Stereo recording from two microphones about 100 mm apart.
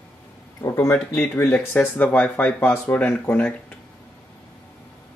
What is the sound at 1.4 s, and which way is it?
Speech, 15° left (ahead or behind).